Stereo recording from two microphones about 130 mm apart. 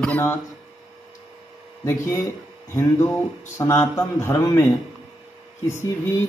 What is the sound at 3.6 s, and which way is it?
Speech, 25° left (ahead or behind).